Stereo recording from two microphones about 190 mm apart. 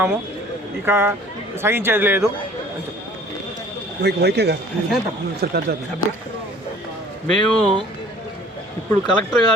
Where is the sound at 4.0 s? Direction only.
60° right (ahead or behind).